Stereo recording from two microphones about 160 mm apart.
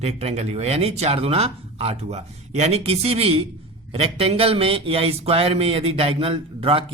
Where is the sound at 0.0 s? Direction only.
40° right (ahead or behind).